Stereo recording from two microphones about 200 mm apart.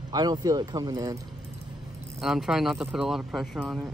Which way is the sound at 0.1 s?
20° right (ahead or behind).